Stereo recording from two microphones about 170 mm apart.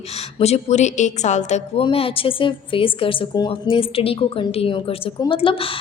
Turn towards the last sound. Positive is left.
turn(degrees=30)  # may be behind; listen again after turning